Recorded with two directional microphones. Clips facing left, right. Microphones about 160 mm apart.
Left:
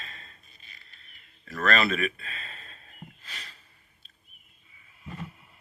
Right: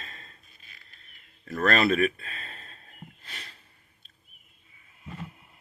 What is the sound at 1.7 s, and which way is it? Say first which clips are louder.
Speech: right 3 dB; 45° right (ahead or behind).